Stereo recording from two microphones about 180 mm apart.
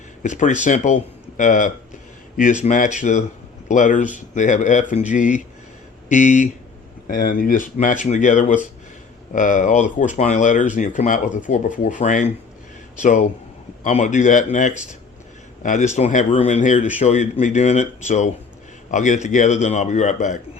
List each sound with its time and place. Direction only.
0.2 s a man's voice: 45° left (ahead or behind)